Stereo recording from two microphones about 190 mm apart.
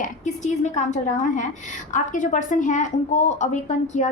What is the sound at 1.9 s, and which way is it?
A woman's voice, 40° left (ahead or behind).